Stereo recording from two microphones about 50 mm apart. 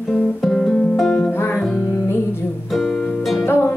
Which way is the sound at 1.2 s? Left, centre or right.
Left.